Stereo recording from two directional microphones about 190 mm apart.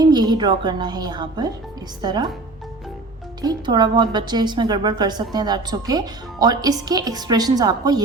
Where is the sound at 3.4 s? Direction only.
25° right (ahead or behind).